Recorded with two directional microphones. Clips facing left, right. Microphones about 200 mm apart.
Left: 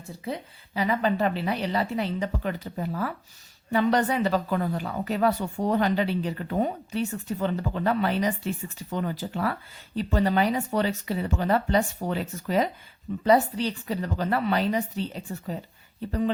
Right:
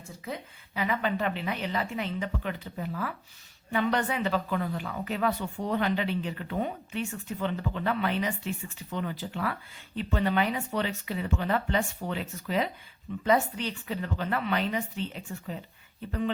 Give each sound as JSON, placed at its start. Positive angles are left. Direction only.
{"t": 0.3, "sound": "speech", "side_deg": 35}